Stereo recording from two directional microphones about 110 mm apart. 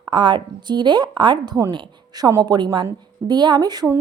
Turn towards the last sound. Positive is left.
turn(degrees=-40)  # may be behind; listen again after turning